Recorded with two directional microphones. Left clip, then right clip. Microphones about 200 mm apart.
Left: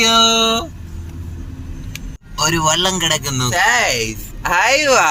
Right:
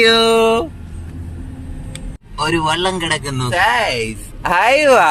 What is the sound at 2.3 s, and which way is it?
A man's voice, centre (ahead or behind).